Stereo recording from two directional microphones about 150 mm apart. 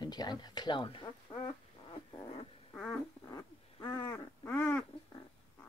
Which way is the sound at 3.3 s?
25° left (ahead or behind).